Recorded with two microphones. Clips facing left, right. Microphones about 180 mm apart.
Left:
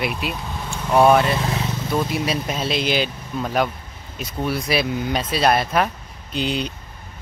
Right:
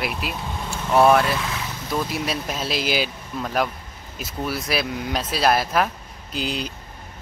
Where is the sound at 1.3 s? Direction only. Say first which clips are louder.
Left 5 dB; 30° left (ahead or behind).